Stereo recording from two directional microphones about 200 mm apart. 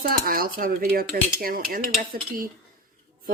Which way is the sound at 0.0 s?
45° right (ahead or behind).